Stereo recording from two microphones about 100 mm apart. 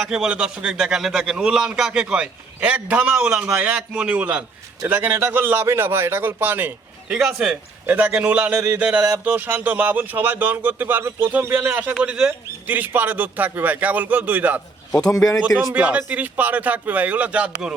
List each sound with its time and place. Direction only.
0.0 s a man's voice: 5° right (ahead or behind)
7.2 s a man's voice: 5° right (ahead or behind)
15.7 s a man's voice: 15° right (ahead or behind)